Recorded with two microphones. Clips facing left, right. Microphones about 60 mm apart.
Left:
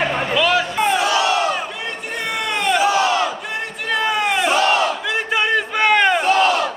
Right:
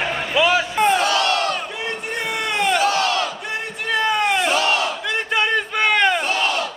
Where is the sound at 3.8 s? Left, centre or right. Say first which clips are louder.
Even; centre.